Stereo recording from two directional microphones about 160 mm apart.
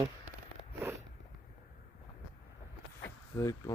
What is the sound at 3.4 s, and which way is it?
Speech, 20° left (ahead or behind).